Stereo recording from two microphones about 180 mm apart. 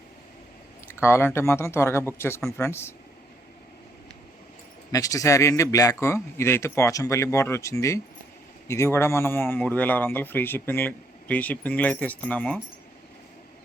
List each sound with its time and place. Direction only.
0.9 s a man's voice: 15° left (ahead or behind)
4.9 s a man's voice: 20° left (ahead or behind)